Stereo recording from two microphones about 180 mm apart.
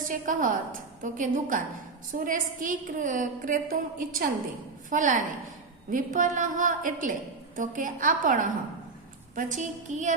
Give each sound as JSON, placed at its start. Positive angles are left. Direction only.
{"t": 0.1, "sound": "a woman's voice", "side_deg": -50}